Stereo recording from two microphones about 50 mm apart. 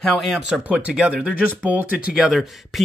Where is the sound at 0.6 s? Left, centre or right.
Right.